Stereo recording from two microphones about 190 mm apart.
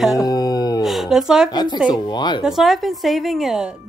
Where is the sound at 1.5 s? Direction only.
20° left (ahead or behind).